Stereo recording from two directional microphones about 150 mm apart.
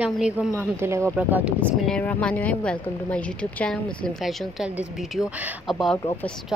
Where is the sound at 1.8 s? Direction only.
5° left (ahead or behind); by 5.7 s 10° right (ahead or behind).